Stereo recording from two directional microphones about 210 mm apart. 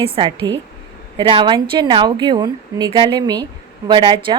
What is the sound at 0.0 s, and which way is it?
A woman's voice, 25° right (ahead or behind).